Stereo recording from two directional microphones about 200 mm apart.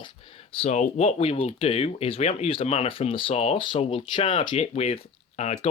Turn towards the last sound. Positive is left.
turn(degrees=30)  # may be behind; listen again after turning